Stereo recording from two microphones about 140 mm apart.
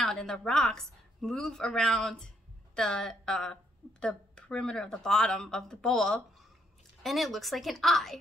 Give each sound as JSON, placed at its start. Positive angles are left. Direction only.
{"t": 0.0, "sound": "a woman's voice", "side_deg": 5}